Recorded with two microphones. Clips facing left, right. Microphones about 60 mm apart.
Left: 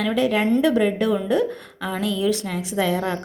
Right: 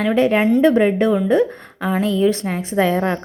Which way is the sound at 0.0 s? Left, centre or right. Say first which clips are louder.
Right 5 dB; right.